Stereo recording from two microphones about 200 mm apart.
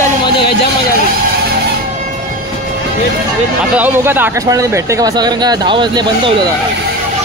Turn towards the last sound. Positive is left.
turn(degrees=-20)  # may be behind; listen again after turning